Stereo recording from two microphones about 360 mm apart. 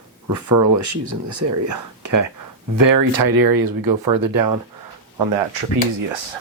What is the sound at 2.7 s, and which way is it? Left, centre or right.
Speech, right.